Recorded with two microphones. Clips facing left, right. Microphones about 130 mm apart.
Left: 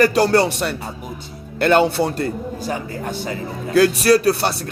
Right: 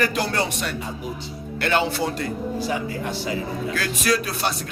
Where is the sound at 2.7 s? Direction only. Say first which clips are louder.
Left 1 dB; 45° left (ahead or behind).